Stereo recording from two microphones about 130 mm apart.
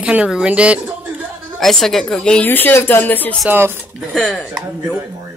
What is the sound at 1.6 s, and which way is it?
A woman's voice, centre (ahead or behind).